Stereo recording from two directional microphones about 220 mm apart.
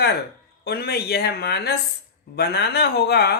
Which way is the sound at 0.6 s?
45° left (ahead or behind).